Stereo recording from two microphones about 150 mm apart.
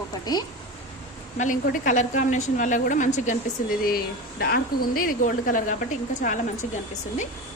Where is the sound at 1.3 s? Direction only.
60° left (ahead or behind).